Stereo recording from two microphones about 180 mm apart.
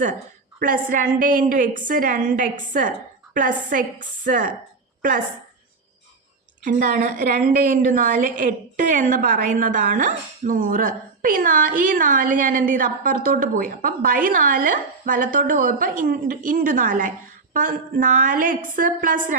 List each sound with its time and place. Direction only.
0.6 s a woman's voice: 50° right (ahead or behind)
6.7 s a woman's voice: 50° right (ahead or behind)